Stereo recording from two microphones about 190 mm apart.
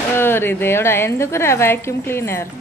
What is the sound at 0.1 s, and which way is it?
A woman's voice, 10° left (ahead or behind).